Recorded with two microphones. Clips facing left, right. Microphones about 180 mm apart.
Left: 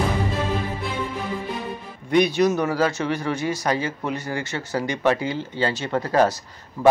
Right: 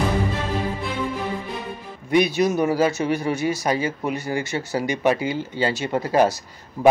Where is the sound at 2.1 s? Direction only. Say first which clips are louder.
Even; 10° right (ahead or behind).